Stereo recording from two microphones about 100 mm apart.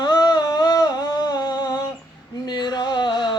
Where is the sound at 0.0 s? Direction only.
45° left (ahead or behind).